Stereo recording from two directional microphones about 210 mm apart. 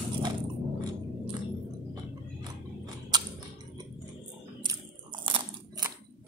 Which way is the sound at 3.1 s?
20° right (ahead or behind).